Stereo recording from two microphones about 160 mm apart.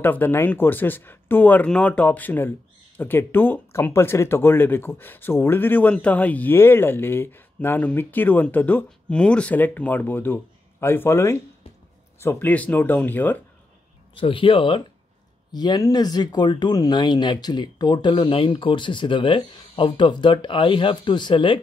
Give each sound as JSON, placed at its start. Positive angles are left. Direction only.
{"t": 0.0, "sound": "speech", "side_deg": 10}
{"t": 14.1, "sound": "speech", "side_deg": 35}